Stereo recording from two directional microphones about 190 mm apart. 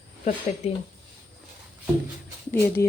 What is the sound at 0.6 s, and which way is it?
Speech, 35° left (ahead or behind).